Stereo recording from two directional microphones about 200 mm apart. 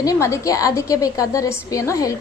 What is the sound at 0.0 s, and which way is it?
A woman's voice, 15° left (ahead or behind).